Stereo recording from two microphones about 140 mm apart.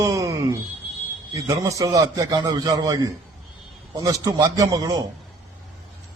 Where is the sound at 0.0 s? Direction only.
25° right (ahead or behind).